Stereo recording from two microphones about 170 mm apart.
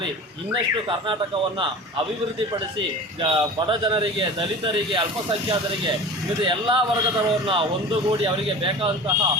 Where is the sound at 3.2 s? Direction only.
30° right (ahead or behind).